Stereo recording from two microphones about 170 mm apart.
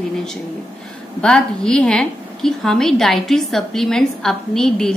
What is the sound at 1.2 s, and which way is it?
A woman's voice, 5° left (ahead or behind).